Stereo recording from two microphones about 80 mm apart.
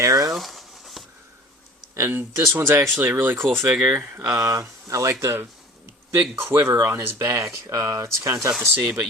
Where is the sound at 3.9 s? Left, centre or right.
Right.